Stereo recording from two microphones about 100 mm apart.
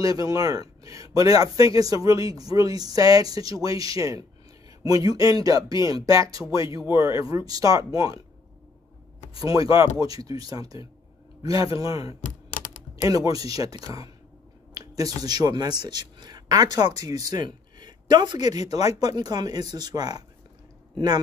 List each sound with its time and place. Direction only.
0.0 s speech: 35° right (ahead or behind)
9.4 s speech: 35° right (ahead or behind)
13.0 s speech: 35° right (ahead or behind)
14.7 s a sound: 35° right (ahead or behind)
15.2 s speech: 40° right (ahead or behind)